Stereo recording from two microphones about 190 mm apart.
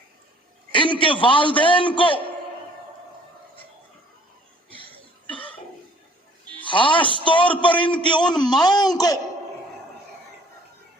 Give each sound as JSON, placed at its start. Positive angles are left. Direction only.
{"t": 0.7, "sound": "a man's voice", "side_deg": 25}
{"t": 6.6, "sound": "a man's voice", "side_deg": 25}